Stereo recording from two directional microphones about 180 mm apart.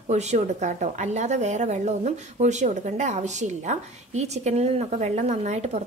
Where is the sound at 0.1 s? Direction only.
40° right (ahead or behind).